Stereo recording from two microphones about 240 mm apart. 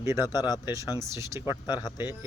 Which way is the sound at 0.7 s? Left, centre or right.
Centre.